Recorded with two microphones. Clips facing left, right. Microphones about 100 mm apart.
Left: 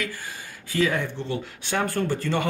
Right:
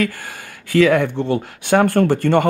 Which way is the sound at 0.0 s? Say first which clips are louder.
Right 10 dB; 65° right (ahead or behind).